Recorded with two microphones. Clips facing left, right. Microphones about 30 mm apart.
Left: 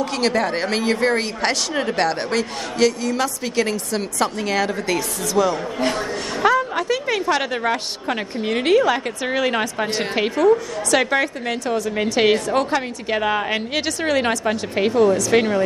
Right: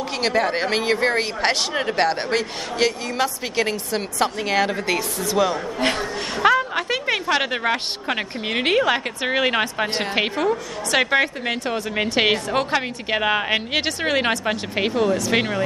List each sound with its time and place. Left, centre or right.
0.1 s a woman's voice: centre